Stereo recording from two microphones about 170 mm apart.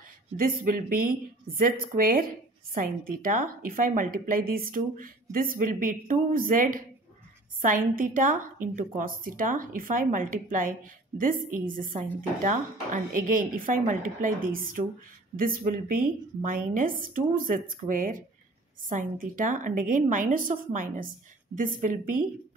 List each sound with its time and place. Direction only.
0.4 s a woman's voice: 55° right (ahead or behind)
15.3 s a woman's voice: 55° right (ahead or behind)